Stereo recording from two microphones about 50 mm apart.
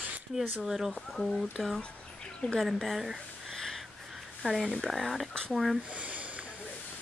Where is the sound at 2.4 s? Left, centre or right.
Centre.